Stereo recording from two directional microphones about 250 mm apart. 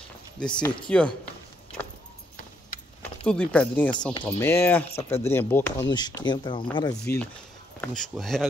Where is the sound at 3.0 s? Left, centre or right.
Centre.